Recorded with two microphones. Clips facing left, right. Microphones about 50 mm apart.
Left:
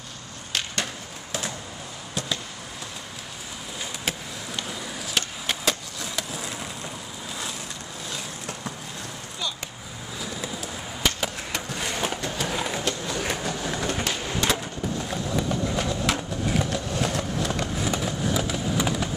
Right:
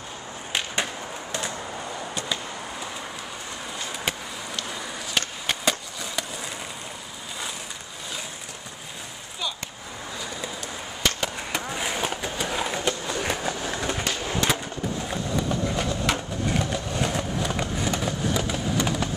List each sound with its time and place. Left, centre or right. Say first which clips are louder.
0.5 s skateboard: right 2 dB; centre
5.1 s skateboard: right 1 dB; centre
10.2 s skateboard: left 3 dB; centre
11.7 s a sound: left 1 dB; centre
13.9 s skateboard: even; centre